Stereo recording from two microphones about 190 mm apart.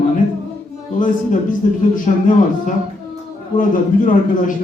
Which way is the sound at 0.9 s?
45° left (ahead or behind).